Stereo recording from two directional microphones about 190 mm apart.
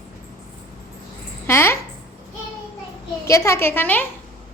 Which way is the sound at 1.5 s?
15° left (ahead or behind).